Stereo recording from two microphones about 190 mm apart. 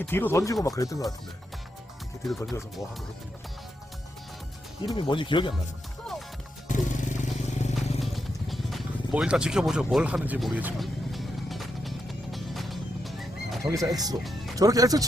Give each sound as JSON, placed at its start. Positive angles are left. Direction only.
{"t": 0.0, "sound": "speech", "side_deg": 10}
{"t": 4.9, "sound": "speech", "side_deg": 25}
{"t": 6.7, "sound": "music", "side_deg": 40}
{"t": 8.0, "sound": "vehicle", "side_deg": 0}
{"t": 13.6, "sound": "speech", "side_deg": -15}